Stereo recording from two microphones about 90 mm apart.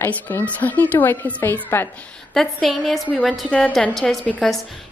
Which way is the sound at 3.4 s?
15° left (ahead or behind).